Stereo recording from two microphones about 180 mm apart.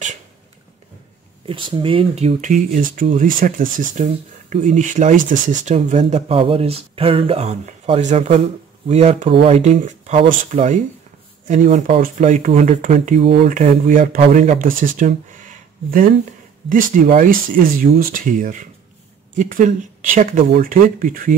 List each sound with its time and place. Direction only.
1.4 s speech: 30° right (ahead or behind)
13.5 s speech: 45° right (ahead or behind)